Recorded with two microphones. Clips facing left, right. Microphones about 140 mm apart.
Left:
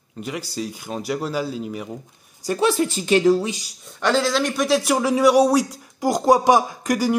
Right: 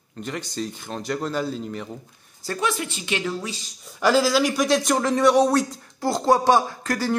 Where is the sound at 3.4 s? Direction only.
15° left (ahead or behind).